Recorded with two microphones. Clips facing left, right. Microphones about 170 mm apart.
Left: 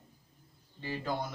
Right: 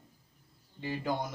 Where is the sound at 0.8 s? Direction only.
15° right (ahead or behind).